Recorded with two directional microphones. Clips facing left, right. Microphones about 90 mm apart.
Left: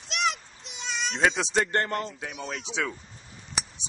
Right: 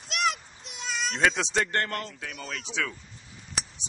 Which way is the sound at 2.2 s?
Centre (ahead or behind).